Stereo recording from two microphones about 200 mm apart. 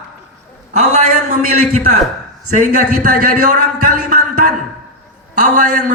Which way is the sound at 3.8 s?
45° right (ahead or behind).